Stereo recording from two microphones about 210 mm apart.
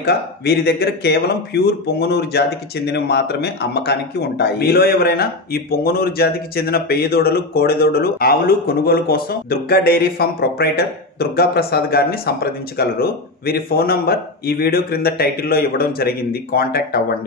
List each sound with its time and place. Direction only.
0.0 s speech: 50° left (ahead or behind)